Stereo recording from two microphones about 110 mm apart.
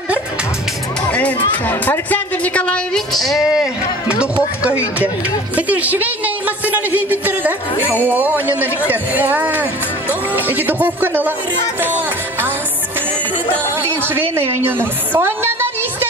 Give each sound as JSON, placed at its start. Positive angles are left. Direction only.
{"t": 1.7, "sound": "speech", "side_deg": 15}
{"t": 14.0, "sound": "a woman's voice", "side_deg": -20}